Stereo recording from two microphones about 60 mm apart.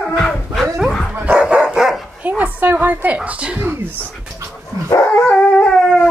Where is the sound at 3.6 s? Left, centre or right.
Right.